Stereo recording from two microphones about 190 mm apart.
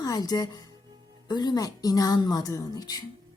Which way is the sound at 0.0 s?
20° left (ahead or behind).